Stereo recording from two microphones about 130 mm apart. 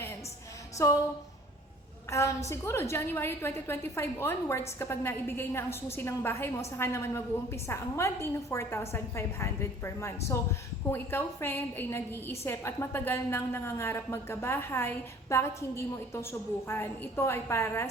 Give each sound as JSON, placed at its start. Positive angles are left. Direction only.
{"t": 0.8, "sound": "a woman's voice", "side_deg": 25}
{"t": 2.0, "sound": "a woman's voice", "side_deg": 20}